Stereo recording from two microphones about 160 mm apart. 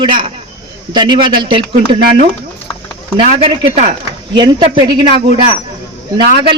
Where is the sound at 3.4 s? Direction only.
35° right (ahead or behind).